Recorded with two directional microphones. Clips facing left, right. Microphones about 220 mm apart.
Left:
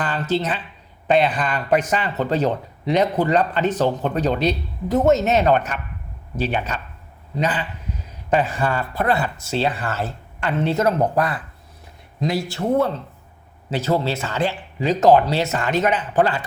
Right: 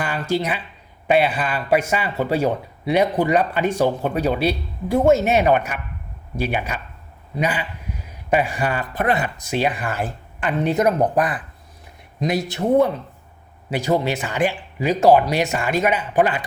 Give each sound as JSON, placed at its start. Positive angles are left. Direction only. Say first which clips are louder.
{"t": 0.0, "sound": "speech", "louder": "even", "side_deg": -10}